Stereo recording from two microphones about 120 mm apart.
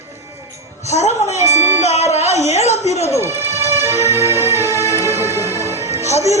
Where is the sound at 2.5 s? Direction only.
65° left (ahead or behind).